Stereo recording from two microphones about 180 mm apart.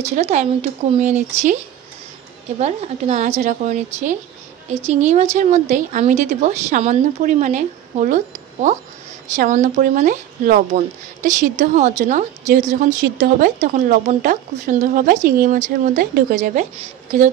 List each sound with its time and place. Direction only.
0.0 s speech: 40° right (ahead or behind)
2.6 s speech: 40° right (ahead or behind)